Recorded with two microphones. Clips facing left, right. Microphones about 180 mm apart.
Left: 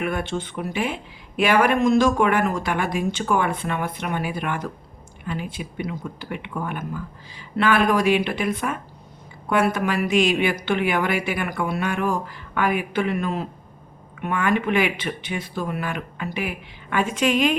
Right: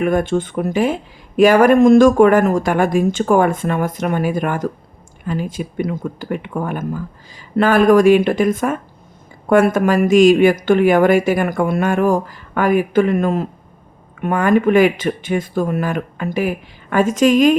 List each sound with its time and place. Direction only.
0.0 s speech: 45° right (ahead or behind)